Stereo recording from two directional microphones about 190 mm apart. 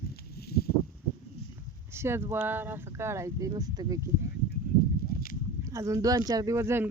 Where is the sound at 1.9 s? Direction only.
15° right (ahead or behind).